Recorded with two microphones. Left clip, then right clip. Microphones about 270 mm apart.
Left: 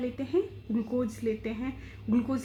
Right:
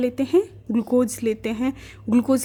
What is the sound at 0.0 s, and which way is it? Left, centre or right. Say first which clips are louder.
Speech: right 10 dB; right.